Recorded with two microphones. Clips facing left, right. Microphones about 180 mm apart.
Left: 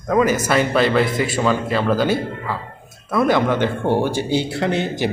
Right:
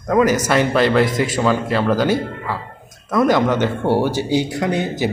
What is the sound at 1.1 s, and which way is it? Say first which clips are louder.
Speech: right 1 dB; 45° right (ahead or behind).